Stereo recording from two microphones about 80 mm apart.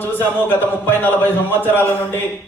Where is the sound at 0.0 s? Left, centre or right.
Left.